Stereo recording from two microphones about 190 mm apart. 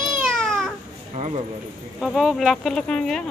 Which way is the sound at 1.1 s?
35° right (ahead or behind).